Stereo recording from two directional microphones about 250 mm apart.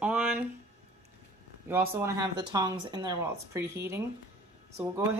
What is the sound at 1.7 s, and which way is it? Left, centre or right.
Speech, centre.